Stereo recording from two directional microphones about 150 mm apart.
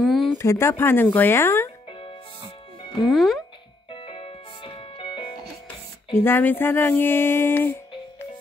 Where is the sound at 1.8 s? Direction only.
35° left (ahead or behind).